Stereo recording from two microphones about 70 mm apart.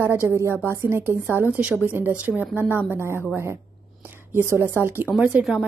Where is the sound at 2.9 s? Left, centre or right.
Right.